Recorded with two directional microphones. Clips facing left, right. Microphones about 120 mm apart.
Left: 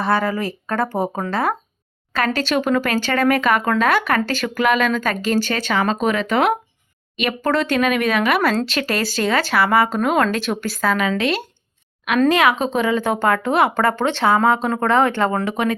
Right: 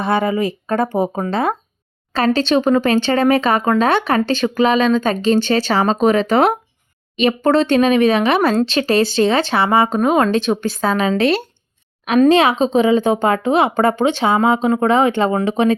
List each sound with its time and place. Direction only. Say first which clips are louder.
0.0 s speech: right 3 dB; 20° right (ahead or behind)